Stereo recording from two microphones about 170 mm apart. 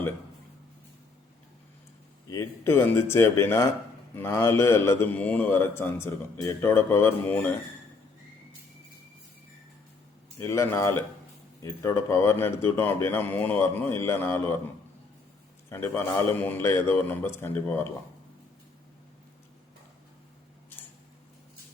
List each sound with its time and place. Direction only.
2.3 s a man's voice: 15° left (ahead or behind)
10.3 s a man's voice: 15° left (ahead or behind)
15.7 s a man's voice: 15° left (ahead or behind)